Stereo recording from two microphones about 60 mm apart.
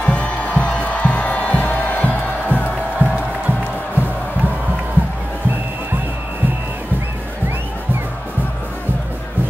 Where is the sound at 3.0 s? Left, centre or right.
Right.